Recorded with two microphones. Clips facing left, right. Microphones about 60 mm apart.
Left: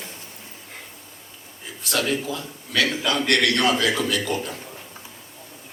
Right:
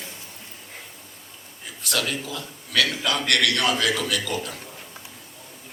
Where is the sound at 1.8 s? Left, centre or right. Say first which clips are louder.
Left 3 dB; left.